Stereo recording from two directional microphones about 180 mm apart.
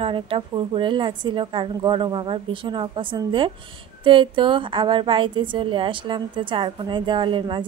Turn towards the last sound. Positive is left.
turn(degrees=-25)  # may be behind; listen again after turning